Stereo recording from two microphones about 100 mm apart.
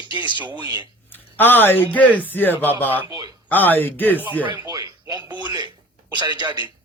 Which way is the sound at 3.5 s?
20° left (ahead or behind).